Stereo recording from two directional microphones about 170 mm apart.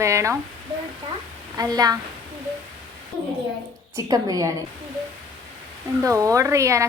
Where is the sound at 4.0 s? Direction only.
20° right (ahead or behind).